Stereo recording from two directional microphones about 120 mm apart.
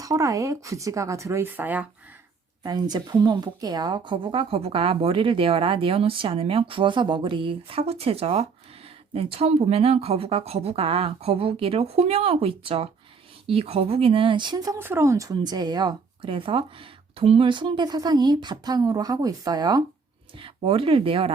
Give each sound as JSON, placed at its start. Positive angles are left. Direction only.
{"t": 0.0, "sound": "speech", "side_deg": -30}
{"t": 2.6, "sound": "a woman's voice", "side_deg": -35}
{"t": 14.8, "sound": "speech", "side_deg": -20}
{"t": 20.3, "sound": "a woman's voice", "side_deg": -50}